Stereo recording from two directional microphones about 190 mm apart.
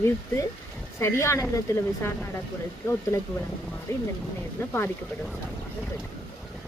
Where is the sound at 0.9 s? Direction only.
15° left (ahead or behind).